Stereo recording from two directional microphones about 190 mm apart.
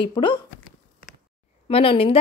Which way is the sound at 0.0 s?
25° left (ahead or behind).